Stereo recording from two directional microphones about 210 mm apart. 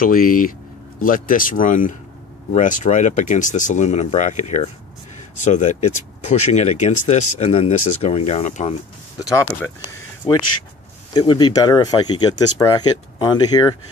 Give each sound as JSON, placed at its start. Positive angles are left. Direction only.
{"t": 0.0, "sound": "speech", "side_deg": 40}
{"t": 9.2, "sound": "speech", "side_deg": 15}
{"t": 11.1, "sound": "speech", "side_deg": 20}